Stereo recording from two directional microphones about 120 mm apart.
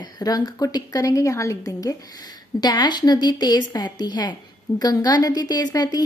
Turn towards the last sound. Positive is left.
turn(degrees=35)  # may be behind; listen again after turning